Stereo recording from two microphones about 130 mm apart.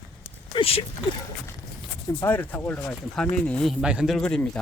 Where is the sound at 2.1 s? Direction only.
15° left (ahead or behind).